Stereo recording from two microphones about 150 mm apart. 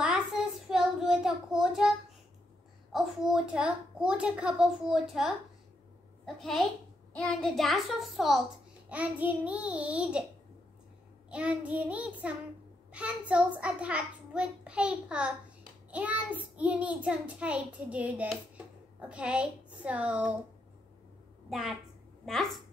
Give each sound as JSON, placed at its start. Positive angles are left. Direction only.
{"t": 0.0, "sound": "child singing", "side_deg": -5}
{"t": 2.9, "sound": "a child's voice", "side_deg": 0}
{"t": 11.2, "sound": "a child's voice", "side_deg": -10}
{"t": 21.5, "sound": "a woman's voice", "side_deg": 0}